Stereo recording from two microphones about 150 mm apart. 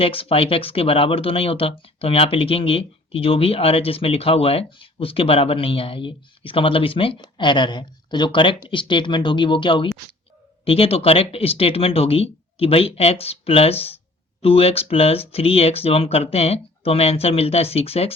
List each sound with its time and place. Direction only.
0.0 s speech: 40° left (ahead or behind)